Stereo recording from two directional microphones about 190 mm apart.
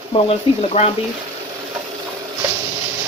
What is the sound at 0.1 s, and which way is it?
Speech, 30° left (ahead or behind).